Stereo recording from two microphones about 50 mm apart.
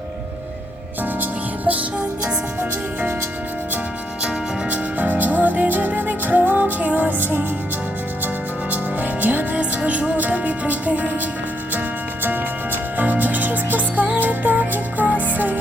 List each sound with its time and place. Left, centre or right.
1.2 s music: right
4.7 s music: right
7.2 s music: right
8.7 s music: right
13.0 s music: right